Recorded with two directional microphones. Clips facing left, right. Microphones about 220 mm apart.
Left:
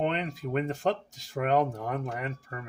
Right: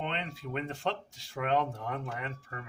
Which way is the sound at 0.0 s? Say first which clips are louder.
Left 7 dB; 40° left (ahead or behind).